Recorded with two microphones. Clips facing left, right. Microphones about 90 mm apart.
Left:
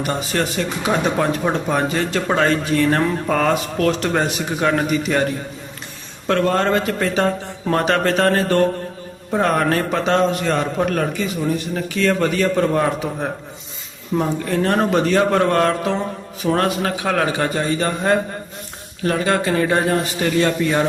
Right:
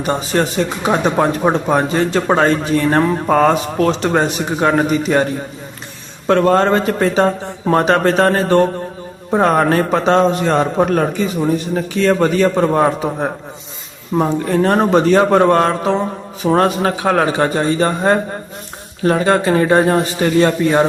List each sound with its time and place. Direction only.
0.0 s speech: 25° right (ahead or behind)
6.2 s a man's voice: 35° right (ahead or behind)